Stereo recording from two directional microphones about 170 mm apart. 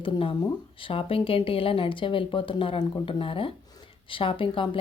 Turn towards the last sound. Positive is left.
turn(degrees=30)  # may be behind; listen again after turning